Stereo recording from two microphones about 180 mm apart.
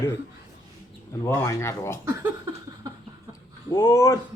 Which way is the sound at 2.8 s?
20° right (ahead or behind).